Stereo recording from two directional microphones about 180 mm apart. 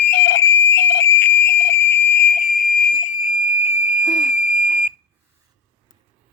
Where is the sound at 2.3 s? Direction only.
45° left (ahead or behind).